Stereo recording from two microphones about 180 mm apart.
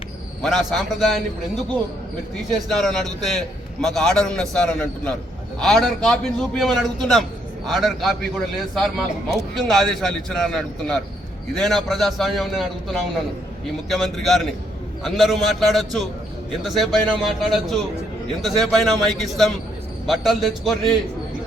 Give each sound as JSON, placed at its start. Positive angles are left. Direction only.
{"t": 0.4, "sound": "a man's voice", "side_deg": 0}
{"t": 2.7, "sound": "a man's voice", "side_deg": 0}